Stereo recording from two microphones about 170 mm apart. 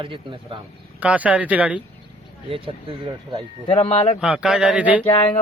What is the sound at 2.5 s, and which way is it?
Speech, 30° right (ahead or behind).